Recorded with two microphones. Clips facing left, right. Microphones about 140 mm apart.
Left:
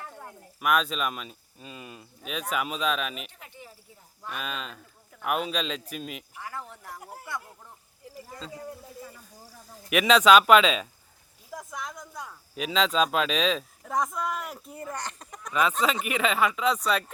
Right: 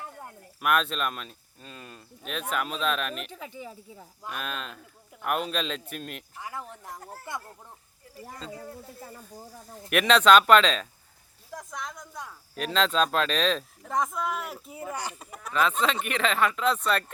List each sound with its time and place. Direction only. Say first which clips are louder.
0.6 s speech: even; centre (ahead or behind)
6.4 s speech: right 2 dB; 15° right (ahead or behind)
7.0 s speech: even; 15° left (ahead or behind)
9.7 s speech: left 1 dB; centre (ahead or behind)